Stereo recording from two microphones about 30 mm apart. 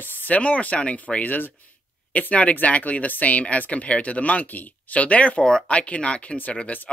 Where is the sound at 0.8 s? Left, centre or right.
Left.